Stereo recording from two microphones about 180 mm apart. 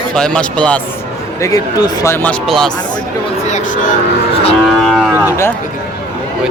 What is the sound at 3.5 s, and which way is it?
Speech, 45° left (ahead or behind).